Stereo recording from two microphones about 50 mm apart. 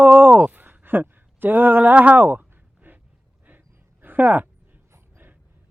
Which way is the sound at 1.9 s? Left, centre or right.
Right.